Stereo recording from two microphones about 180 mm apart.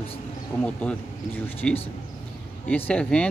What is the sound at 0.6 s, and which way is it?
Speech, 5° left (ahead or behind).